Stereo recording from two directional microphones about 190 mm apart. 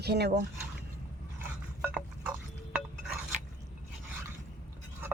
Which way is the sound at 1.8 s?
10° right (ahead or behind).